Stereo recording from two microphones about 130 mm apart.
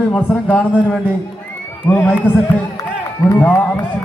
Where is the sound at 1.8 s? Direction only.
10° left (ahead or behind).